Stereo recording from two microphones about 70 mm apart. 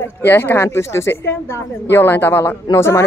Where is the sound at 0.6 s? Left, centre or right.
Left.